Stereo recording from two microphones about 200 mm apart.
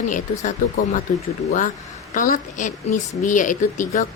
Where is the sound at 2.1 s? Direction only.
40° left (ahead or behind).